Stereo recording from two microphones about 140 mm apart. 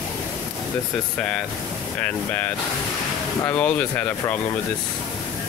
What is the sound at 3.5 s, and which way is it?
Speech, 10° left (ahead or behind).